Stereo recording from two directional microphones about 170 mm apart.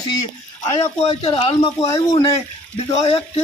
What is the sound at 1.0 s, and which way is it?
Speech, 30° left (ahead or behind).